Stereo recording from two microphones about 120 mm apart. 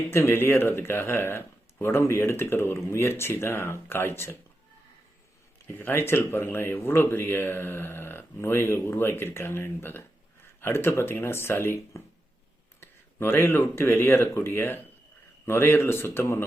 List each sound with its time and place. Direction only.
0.1 s speech: 20° left (ahead or behind)
5.7 s speech: 20° left (ahead or behind)